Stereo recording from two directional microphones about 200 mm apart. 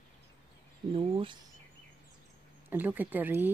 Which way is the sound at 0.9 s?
25° right (ahead or behind).